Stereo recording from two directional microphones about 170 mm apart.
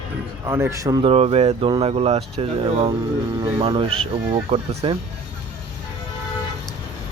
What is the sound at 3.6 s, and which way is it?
Speech, 35° right (ahead or behind).